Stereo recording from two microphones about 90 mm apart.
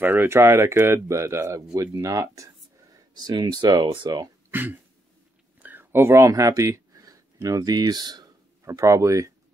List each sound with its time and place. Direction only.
0.0 s speech: 25° right (ahead or behind)
3.2 s speech: 50° right (ahead or behind)
4.5 s speech: 20° right (ahead or behind)
5.6 s a sound: 20° right (ahead or behind); by 7.2 s 40° right (ahead or behind)
7.4 s speech: 45° right (ahead or behind)
8.6 s speech: 35° right (ahead or behind)